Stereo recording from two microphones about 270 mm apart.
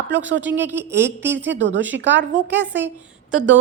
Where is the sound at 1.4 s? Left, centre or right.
Right.